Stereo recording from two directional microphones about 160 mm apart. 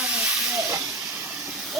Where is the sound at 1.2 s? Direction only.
10° right (ahead or behind).